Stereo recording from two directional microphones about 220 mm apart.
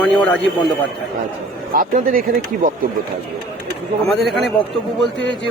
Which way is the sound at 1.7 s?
40° right (ahead or behind).